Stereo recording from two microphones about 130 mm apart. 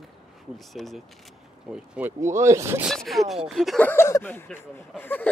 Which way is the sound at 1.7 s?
10° right (ahead or behind).